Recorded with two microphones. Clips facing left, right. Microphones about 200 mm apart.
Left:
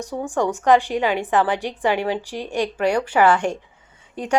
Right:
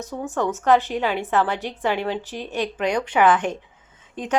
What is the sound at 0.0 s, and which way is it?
A woman's voice, 15° left (ahead or behind).